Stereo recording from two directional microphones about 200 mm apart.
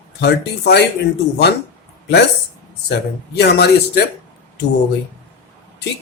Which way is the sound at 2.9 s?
55° left (ahead or behind).